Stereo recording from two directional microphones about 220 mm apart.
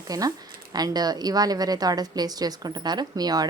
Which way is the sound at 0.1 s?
15° right (ahead or behind).